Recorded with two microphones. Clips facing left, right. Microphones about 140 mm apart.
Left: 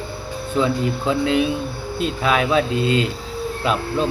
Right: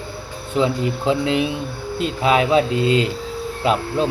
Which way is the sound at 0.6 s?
25° right (ahead or behind).